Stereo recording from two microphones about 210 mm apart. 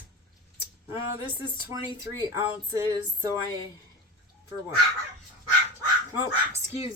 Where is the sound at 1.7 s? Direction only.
15° right (ahead or behind).